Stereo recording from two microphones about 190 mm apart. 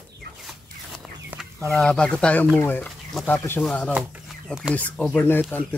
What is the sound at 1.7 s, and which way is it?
Speech, 5° left (ahead or behind).